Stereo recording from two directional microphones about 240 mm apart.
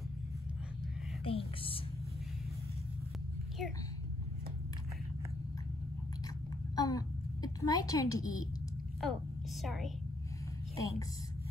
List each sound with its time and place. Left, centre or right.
1.2 s whispering: left
6.7 s a sound: centre
9.0 s a woman's voice: centre